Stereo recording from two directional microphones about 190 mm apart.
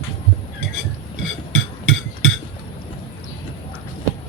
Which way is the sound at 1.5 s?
90° left.